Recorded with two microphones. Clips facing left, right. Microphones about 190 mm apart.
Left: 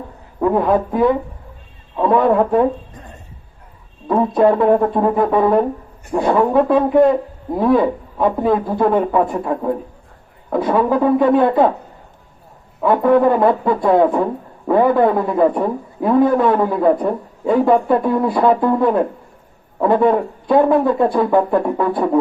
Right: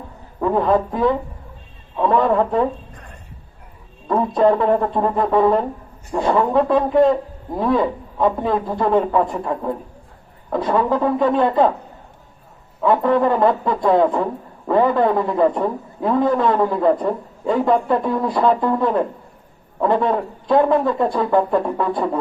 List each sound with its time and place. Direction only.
0.3 s a man's voice: 10° left (ahead or behind)
2.9 s a sound: 25° left (ahead or behind)
4.1 s a man's voice: 10° left (ahead or behind)
12.8 s a man's voice: 10° left (ahead or behind)